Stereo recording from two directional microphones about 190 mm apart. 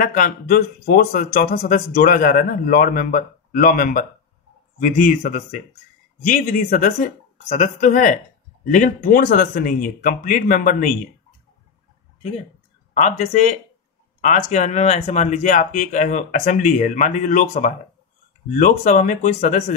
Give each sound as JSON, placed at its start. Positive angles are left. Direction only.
{"t": 0.0, "sound": "speech", "side_deg": 45}
{"t": 9.0, "sound": "speech", "side_deg": 50}
{"t": 12.9, "sound": "speech", "side_deg": 35}